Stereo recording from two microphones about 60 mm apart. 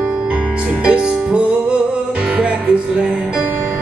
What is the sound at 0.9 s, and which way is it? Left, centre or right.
Music, centre.